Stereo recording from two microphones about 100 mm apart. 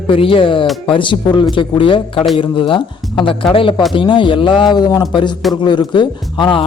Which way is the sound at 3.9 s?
55° left (ahead or behind).